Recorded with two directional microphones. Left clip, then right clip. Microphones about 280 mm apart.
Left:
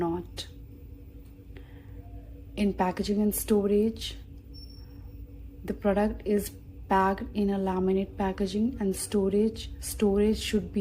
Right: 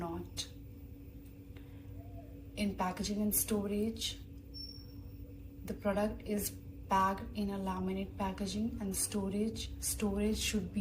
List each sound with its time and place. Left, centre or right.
2.6 s speech: left
5.6 s a woman's voice: left